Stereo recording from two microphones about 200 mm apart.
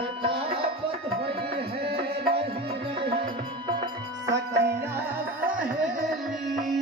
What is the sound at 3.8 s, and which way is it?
Music, 15° right (ahead or behind).